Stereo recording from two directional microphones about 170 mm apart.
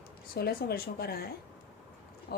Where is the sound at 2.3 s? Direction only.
70° left (ahead or behind).